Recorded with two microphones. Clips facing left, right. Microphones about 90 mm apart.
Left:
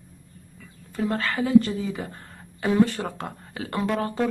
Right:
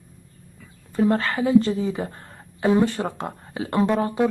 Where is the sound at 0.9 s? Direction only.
30° right (ahead or behind).